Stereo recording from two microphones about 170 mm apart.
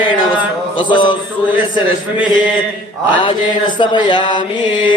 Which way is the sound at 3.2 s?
30° left (ahead or behind).